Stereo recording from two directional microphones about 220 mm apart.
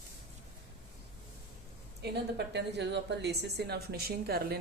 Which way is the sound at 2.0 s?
50° right (ahead or behind).